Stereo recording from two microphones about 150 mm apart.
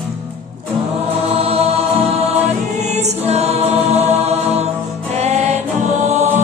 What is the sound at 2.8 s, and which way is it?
Choir, 50° right (ahead or behind).